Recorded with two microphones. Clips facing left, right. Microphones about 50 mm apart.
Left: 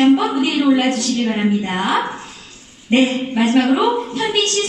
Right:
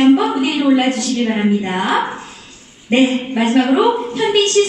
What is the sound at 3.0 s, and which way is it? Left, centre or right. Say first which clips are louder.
Speech: right 2 dB; right.